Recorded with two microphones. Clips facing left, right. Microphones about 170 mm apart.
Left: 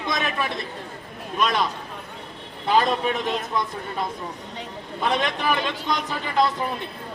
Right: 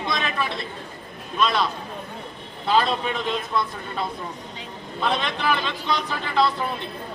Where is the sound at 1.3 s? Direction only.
15° left (ahead or behind).